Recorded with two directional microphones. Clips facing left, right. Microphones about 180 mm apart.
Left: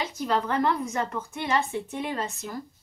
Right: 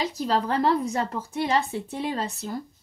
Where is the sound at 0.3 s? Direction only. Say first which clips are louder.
Right 2 dB; 30° right (ahead or behind).